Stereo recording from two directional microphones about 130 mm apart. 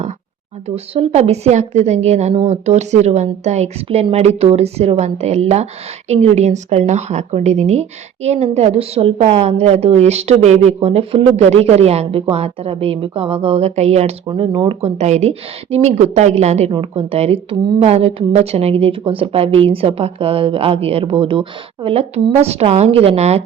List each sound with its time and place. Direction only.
0.9 s a woman's voice: 55° right (ahead or behind)
14.3 s a woman's voice: 40° right (ahead or behind); by 16.7 s 60° right (ahead or behind)
16.7 s speech: 50° right (ahead or behind)